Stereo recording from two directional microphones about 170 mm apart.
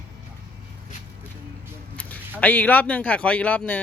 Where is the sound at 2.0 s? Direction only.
10° left (ahead or behind).